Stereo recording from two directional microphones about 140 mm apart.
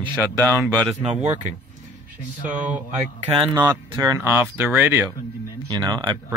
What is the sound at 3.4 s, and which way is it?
Speech, 20° right (ahead or behind).